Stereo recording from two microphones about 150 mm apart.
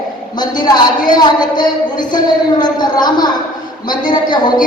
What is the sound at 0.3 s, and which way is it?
A woman's voice, 30° left (ahead or behind).